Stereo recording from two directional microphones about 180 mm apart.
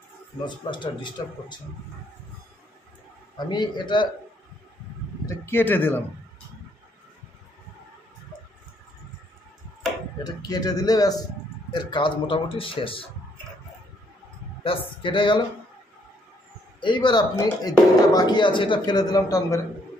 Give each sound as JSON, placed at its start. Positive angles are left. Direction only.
{"t": 0.7, "sound": "speech", "side_deg": 25}
{"t": 3.3, "sound": "speech", "side_deg": 25}
{"t": 5.2, "sound": "a man's voice", "side_deg": 15}
{"t": 10.2, "sound": "speech", "side_deg": 20}
{"t": 14.6, "sound": "speech", "side_deg": 30}
{"t": 16.8, "sound": "speech", "side_deg": 25}